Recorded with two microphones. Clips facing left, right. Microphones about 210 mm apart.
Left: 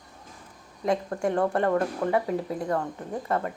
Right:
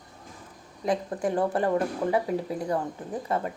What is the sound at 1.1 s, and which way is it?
Speech, 5° right (ahead or behind).